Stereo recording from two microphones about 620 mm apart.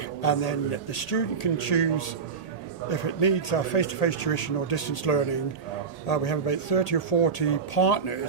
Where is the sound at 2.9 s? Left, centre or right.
Left.